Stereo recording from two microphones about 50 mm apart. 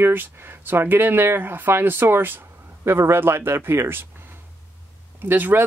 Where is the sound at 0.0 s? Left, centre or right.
Right.